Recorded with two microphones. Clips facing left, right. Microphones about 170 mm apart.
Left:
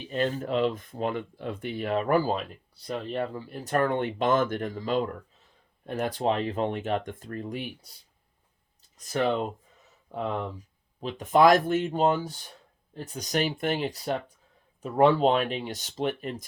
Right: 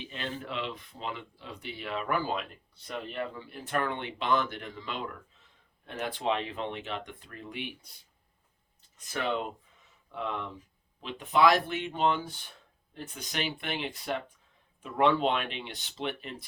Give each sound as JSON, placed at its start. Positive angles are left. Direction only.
{"t": 0.1, "sound": "speech", "side_deg": 45}
{"t": 9.0, "sound": "speech", "side_deg": 40}